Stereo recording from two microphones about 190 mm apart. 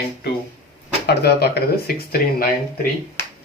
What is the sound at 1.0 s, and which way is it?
Speech, 60° left (ahead or behind).